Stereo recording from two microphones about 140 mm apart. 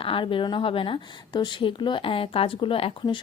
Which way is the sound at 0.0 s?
40° left (ahead or behind).